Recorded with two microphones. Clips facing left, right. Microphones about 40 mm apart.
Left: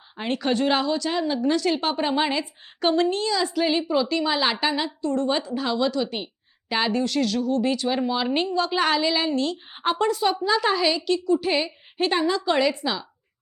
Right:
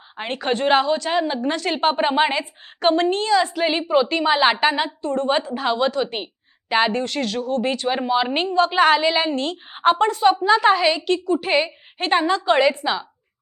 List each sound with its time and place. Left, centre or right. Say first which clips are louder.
0.2 s a woman's voice: right 1 dB; right